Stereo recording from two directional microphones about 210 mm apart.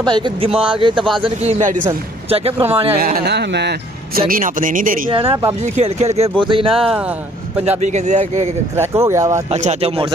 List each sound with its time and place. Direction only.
0.0 s speech: 25° right (ahead or behind)
2.6 s speech: 10° right (ahead or behind)
3.0 s speech: 45° right (ahead or behind)
5.1 s speech: 25° right (ahead or behind)
6.7 s speech: centre (ahead or behind)
7.8 s speech: 35° right (ahead or behind)
8.7 s speech: 15° right (ahead or behind)
9.5 s speech: 30° right (ahead or behind)